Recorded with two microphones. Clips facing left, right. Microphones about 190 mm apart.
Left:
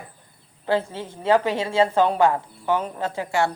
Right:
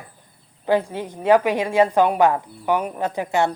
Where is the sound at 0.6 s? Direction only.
15° right (ahead or behind).